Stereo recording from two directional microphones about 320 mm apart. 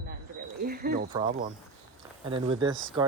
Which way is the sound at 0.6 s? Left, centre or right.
Right.